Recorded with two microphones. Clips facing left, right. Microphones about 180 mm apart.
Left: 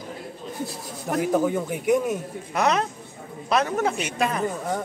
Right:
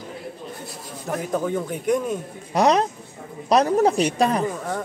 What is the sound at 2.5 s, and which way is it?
Speech, 35° right (ahead or behind).